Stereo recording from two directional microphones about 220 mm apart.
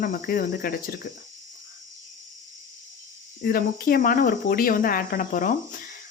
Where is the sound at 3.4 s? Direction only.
40° left (ahead or behind).